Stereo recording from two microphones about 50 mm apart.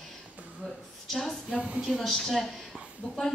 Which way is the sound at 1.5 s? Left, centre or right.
Centre.